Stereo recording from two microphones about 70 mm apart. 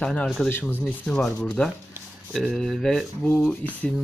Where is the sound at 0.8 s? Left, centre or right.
Centre.